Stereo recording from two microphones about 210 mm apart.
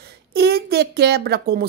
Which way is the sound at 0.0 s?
50° right (ahead or behind).